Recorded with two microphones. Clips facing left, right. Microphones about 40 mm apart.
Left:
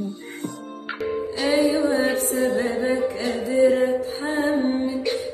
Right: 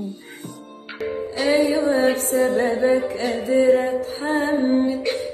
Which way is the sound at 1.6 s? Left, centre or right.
Right.